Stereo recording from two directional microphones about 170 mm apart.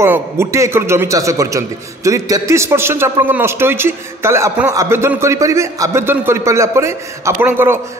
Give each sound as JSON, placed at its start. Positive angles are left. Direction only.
{"t": 0.0, "sound": "a man's voice", "side_deg": -15}